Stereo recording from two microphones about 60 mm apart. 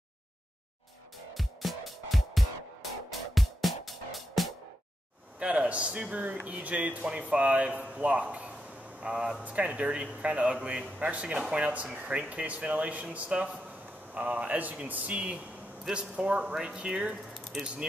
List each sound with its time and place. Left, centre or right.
1.3 s music: centre
5.4 s a man's voice: right
17.5 s speech: centre